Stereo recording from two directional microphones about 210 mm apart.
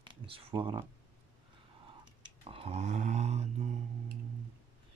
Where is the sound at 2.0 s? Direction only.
25° right (ahead or behind).